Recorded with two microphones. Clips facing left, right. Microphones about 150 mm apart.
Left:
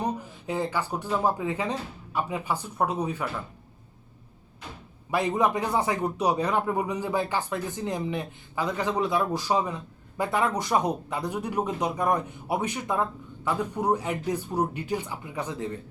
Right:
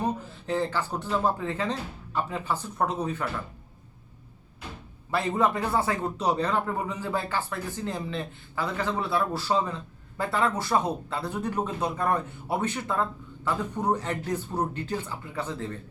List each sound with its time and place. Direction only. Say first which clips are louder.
0.0 s a man's voice: right 1 dB; 15° left (ahead or behind)
5.1 s a man's voice: left 1 dB; 15° left (ahead or behind)